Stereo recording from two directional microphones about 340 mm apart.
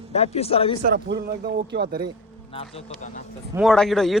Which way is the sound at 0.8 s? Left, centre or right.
Right.